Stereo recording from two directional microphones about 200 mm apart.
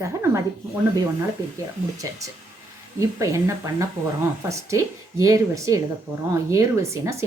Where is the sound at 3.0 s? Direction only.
15° right (ahead or behind).